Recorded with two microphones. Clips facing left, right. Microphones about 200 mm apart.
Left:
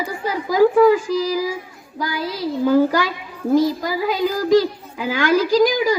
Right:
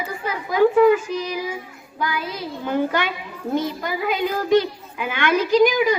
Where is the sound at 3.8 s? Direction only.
35° left (ahead or behind).